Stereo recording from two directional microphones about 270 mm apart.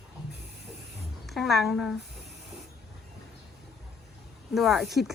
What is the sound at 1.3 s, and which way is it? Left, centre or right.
Speech, centre.